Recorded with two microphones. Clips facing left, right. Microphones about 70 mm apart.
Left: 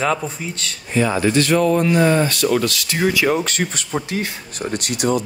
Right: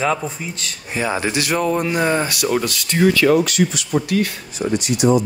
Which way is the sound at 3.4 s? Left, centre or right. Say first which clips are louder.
Right 4 dB; left.